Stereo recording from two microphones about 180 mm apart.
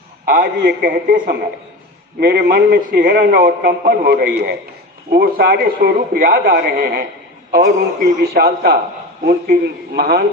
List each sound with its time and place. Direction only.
0.3 s a man's voice: 55° right (ahead or behind)
2.1 s a man's voice: 60° right (ahead or behind)